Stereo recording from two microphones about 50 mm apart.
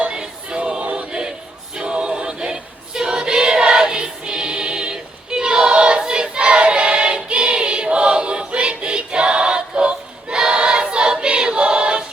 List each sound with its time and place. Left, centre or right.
0.0 s music: centre
1.7 s choir: centre